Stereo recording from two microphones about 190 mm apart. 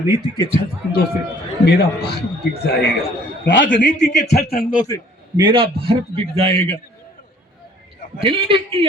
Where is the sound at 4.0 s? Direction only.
60° left (ahead or behind).